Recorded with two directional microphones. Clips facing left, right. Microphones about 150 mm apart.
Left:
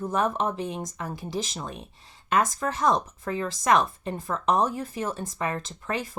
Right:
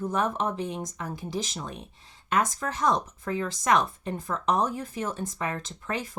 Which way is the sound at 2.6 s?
40° left (ahead or behind).